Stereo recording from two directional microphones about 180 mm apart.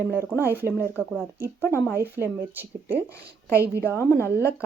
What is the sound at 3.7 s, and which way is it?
Speech, 15° left (ahead or behind).